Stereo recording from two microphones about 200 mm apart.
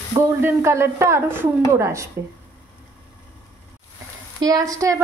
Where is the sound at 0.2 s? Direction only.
10° right (ahead or behind).